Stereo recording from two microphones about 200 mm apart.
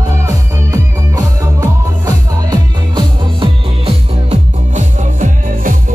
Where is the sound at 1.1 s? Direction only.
15° right (ahead or behind).